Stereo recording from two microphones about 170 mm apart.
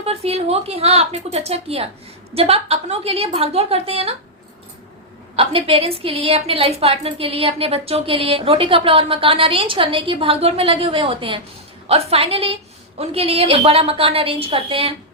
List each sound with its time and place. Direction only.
0.0 s a woman's voice: 35° right (ahead or behind)
5.4 s a woman's voice: 35° right (ahead or behind)